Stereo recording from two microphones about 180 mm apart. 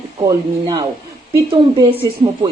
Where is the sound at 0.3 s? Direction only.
20° right (ahead or behind).